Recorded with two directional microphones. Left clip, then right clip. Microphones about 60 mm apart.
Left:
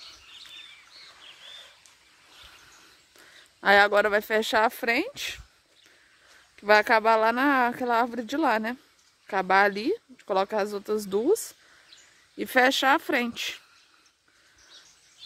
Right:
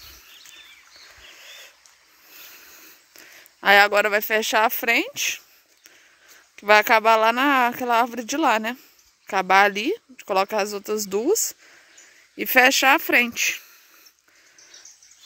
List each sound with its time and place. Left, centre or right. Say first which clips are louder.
1.4 s a sound: right 2 dB; centre
3.6 s speech: right 4 dB; centre
6.5 s speech: right 4 dB; centre